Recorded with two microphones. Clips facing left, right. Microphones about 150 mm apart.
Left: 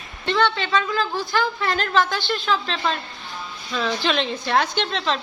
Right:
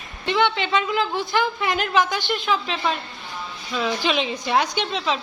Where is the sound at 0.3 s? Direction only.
15° right (ahead or behind).